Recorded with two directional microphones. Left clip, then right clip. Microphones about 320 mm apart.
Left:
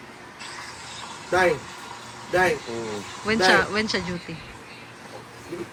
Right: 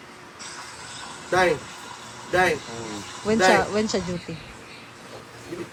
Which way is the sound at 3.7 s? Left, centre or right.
Centre.